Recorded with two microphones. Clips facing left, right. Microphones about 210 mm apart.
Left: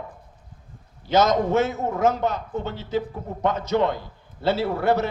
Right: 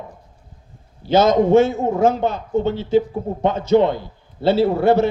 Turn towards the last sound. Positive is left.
turn(degrees=-25)  # may be behind; listen again after turning